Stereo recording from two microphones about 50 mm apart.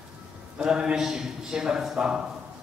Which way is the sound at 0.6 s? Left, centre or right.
Centre.